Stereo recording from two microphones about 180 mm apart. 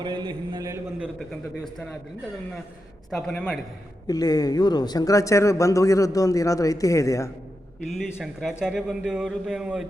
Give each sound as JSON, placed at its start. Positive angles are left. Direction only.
{"t": 0.0, "sound": "a sound", "side_deg": -25}
{"t": 1.6, "sound": "speech", "side_deg": 0}
{"t": 3.1, "sound": "speech", "side_deg": 5}
{"t": 4.0, "sound": "a man's voice", "side_deg": 20}
{"t": 7.9, "sound": "speech", "side_deg": 0}